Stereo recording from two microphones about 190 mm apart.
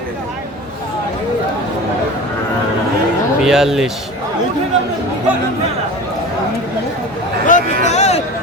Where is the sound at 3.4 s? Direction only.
5° right (ahead or behind).